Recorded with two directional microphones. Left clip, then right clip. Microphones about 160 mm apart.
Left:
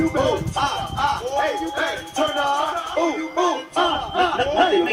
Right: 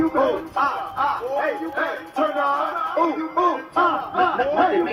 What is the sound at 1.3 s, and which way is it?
Speech, 40° right (ahead or behind).